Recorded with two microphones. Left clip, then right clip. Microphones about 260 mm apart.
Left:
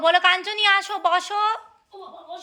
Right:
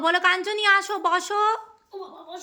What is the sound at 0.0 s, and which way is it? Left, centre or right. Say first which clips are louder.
Speech: left 3 dB; centre.